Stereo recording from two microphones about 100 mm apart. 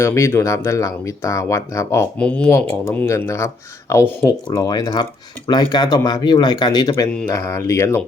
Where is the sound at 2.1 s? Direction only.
15° left (ahead or behind).